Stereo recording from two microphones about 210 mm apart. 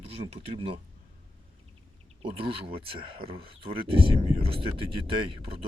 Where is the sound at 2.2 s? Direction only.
25° right (ahead or behind).